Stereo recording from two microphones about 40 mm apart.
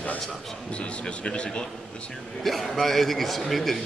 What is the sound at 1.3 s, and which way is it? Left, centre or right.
Speech, left.